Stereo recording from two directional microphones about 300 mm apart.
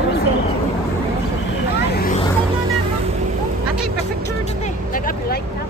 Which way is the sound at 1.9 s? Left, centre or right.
Left.